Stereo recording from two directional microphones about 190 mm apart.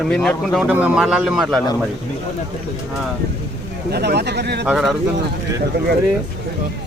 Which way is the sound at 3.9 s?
60° right (ahead or behind).